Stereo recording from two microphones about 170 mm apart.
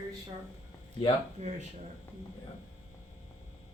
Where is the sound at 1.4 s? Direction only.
40° right (ahead or behind).